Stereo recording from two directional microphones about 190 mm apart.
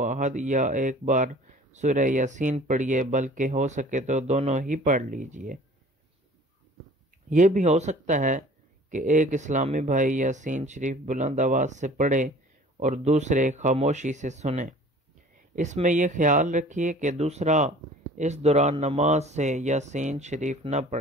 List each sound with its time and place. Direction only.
0.0 s speech: 40° right (ahead or behind)
7.2 s speech: 40° right (ahead or behind)